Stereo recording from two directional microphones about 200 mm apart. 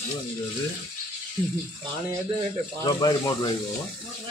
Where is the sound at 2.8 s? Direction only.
20° left (ahead or behind).